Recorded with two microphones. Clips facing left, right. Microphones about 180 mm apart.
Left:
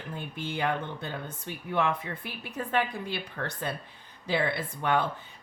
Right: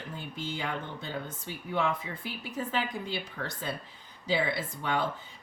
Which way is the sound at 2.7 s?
60° left (ahead or behind).